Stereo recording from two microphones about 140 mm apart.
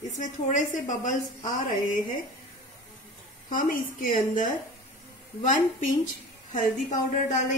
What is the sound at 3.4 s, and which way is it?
A woman's voice, 75° left (ahead or behind).